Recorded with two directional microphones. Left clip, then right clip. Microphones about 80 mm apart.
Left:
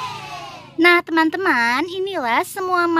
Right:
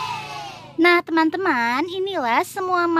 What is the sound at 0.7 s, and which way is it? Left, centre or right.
A child's voice, centre.